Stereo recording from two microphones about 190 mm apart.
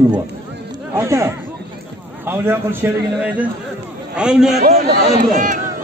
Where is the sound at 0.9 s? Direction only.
15° right (ahead or behind).